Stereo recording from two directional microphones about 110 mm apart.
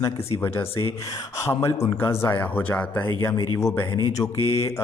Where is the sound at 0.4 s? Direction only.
25° left (ahead or behind).